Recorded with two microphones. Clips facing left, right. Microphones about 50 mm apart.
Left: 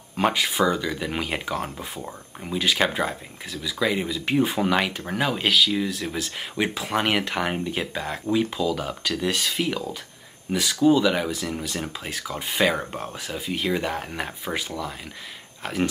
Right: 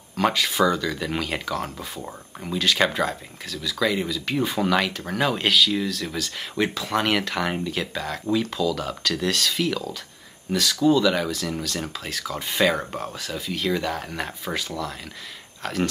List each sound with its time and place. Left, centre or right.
0.1 s speech: centre
5.9 s speech: centre
13.0 s speech: left